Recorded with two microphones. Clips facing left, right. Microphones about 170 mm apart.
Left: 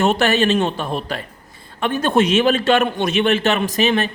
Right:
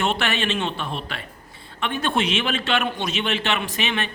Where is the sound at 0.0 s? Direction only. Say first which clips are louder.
Left 8 dB; 40° left (ahead or behind).